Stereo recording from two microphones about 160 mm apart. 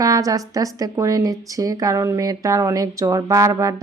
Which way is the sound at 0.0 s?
20° right (ahead or behind).